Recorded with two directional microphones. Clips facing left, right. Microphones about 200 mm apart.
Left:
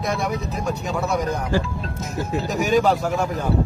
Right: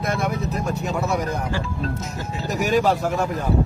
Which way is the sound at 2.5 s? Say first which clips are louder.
Even; centre (ahead or behind).